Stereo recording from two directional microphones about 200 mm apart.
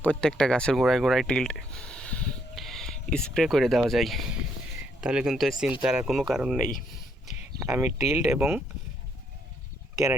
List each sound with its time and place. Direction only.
0.0 s speech: 5° left (ahead or behind)
7.8 s speech: 15° right (ahead or behind)